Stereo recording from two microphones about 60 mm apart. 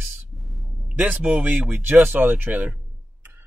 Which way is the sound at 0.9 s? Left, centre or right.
Right.